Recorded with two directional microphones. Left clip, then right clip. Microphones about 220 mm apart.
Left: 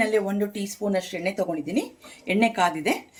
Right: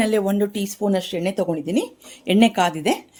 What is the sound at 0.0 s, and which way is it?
Speech, 50° right (ahead or behind).